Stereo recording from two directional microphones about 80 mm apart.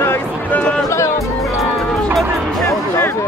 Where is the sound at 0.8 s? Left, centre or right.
Left.